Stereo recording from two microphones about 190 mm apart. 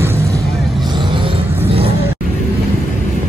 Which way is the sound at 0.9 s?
25° right (ahead or behind).